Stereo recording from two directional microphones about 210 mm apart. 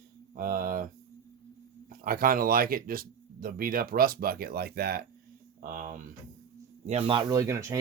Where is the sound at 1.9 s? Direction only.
45° right (ahead or behind).